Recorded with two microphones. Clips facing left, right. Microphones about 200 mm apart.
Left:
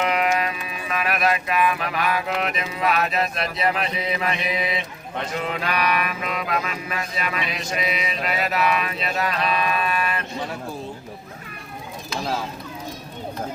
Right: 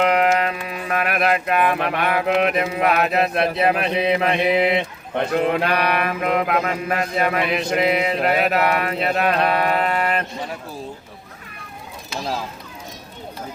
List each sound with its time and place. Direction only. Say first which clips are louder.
0.0 s music: right 4 dB; 60° right (ahead or behind)